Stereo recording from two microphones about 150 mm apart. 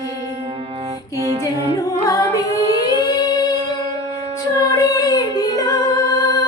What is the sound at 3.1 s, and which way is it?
Singing, 25° left (ahead or behind).